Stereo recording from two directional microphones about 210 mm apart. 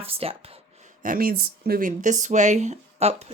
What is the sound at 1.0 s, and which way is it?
Speech, 40° right (ahead or behind).